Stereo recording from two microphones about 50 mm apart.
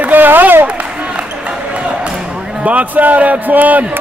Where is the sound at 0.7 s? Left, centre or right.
Right.